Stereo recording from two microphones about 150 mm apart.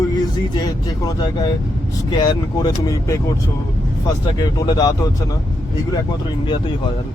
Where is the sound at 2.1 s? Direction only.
25° left (ahead or behind).